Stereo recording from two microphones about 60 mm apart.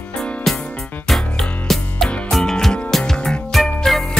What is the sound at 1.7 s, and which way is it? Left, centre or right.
Music, centre.